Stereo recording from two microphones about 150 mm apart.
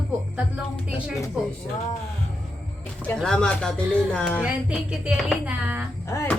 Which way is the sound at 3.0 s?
5° left (ahead or behind).